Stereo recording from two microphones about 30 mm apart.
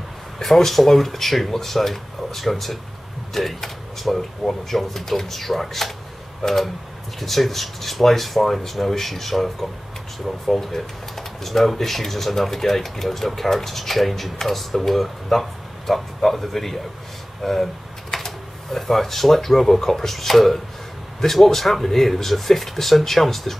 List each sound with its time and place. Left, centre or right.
0.4 s speech: centre
7.2 s speech: centre